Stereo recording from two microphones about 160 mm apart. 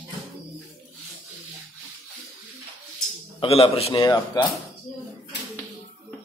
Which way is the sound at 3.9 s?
25° left (ahead or behind).